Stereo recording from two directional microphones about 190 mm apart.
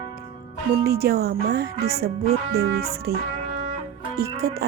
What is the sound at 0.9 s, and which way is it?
Speech, 55° right (ahead or behind).